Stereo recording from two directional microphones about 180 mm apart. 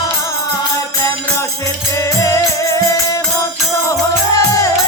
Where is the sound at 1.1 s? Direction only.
15° left (ahead or behind).